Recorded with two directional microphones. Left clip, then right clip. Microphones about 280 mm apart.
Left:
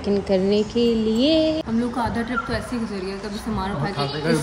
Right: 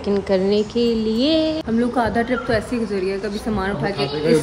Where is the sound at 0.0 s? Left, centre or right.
Right.